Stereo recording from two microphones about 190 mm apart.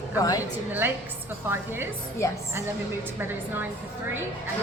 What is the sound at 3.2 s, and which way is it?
Speech, 10° right (ahead or behind).